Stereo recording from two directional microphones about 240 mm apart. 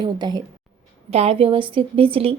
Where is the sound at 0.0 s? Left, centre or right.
Centre.